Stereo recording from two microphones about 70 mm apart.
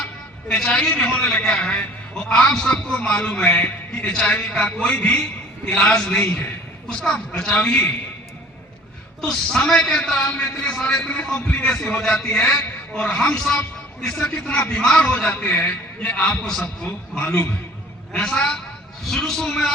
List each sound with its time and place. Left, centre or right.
0.4 s a man's voice: centre
9.2 s a man's voice: centre; by 16.3 s left
16.3 s a man's voice: centre
17.2 s a man's voice: left
18.1 s a man's voice: centre